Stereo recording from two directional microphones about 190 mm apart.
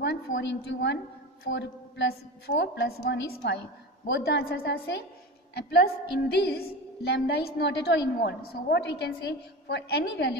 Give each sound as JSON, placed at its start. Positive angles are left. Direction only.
{"t": 0.0, "sound": "a woman's voice", "side_deg": 70}